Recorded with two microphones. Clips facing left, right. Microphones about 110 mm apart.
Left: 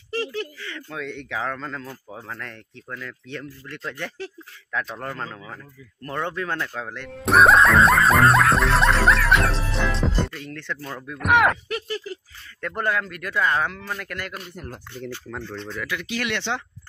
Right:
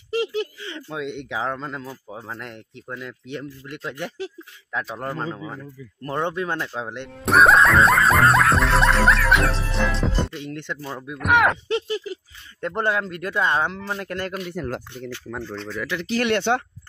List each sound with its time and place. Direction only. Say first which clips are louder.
0.1 s speech: right 4 dB; 20° right (ahead or behind)
7.2 s music: even; centre (ahead or behind)
10.3 s speech: right 2 dB; 20° right (ahead or behind)
11.1 s music: even; centre (ahead or behind)
11.5 s speech: right 5 dB; 20° right (ahead or behind)
15.0 s music: right 1 dB; 5° right (ahead or behind)
15.9 s speech: right 7 dB; 35° right (ahead or behind)